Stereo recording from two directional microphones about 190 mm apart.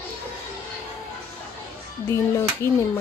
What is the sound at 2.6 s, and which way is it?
Speech, 15° left (ahead or behind).